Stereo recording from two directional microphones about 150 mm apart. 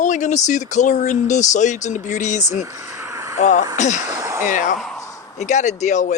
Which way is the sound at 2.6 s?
20° right (ahead or behind).